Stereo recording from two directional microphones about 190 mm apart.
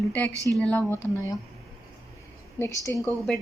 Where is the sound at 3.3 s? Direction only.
5° left (ahead or behind).